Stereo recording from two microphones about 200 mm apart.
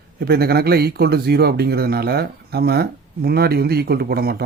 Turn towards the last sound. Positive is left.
turn(degrees=-50)  # may be behind; listen again after turning